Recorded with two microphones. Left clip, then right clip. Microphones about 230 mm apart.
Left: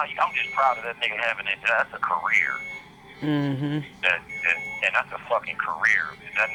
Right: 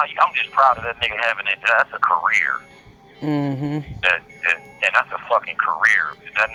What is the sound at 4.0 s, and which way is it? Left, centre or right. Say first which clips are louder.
Speech: right 4 dB; right.